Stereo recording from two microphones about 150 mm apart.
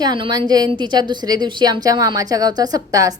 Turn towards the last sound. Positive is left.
turn(degrees=-25)  # may be behind; listen again after turning